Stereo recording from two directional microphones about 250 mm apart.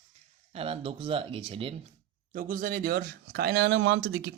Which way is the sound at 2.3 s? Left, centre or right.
Right.